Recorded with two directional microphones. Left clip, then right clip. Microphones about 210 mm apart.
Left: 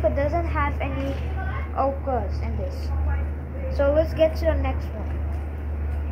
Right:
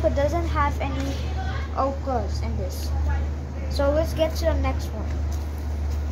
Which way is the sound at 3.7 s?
30° right (ahead or behind).